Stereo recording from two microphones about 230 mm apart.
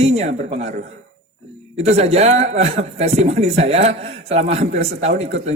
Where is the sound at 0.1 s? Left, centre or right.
Right.